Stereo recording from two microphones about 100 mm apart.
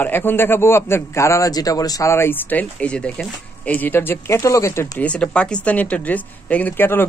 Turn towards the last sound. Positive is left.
turn(degrees=20)  # may be behind; listen again after turning